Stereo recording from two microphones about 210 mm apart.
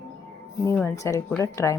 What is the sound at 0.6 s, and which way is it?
Speech, 15° left (ahead or behind).